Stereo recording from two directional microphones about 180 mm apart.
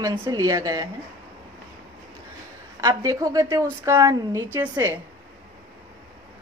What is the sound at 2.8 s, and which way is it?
A woman's voice, 20° right (ahead or behind).